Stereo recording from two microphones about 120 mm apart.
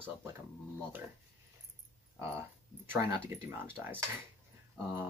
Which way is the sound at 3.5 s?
15° right (ahead or behind).